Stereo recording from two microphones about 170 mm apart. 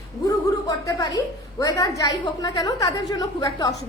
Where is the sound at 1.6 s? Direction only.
20° left (ahead or behind).